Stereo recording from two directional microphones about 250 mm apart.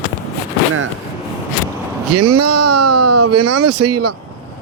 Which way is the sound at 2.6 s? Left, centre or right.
Right.